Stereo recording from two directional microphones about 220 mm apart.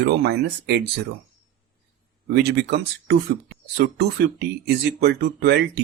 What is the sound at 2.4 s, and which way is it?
Speech, 50° right (ahead or behind).